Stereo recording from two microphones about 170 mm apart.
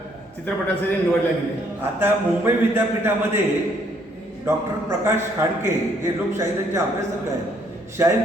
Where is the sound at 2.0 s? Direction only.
15° right (ahead or behind).